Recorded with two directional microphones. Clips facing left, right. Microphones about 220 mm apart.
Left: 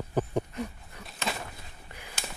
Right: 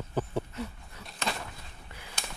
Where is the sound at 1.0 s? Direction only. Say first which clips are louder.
Even; centre (ahead or behind).